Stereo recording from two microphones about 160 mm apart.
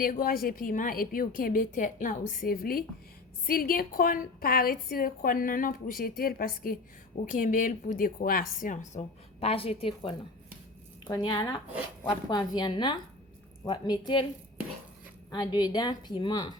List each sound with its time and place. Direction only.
0.0 s a woman's voice: 65° left (ahead or behind)
7.3 s a woman's voice: 55° left (ahead or behind); by 14.3 s 30° left (ahead or behind)
15.3 s a woman's voice: 25° left (ahead or behind)